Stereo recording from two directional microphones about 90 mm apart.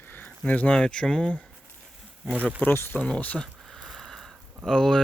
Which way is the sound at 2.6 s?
25° left (ahead or behind).